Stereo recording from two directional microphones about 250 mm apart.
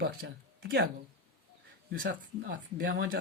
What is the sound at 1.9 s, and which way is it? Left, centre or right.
Speech, right.